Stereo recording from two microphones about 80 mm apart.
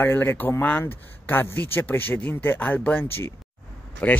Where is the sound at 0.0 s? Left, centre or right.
Left.